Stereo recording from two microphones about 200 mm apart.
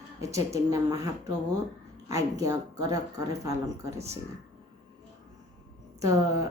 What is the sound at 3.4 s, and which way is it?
Speech, 15° right (ahead or behind).